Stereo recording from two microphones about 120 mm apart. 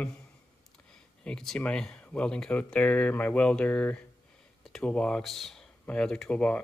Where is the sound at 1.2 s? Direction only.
5° left (ahead or behind).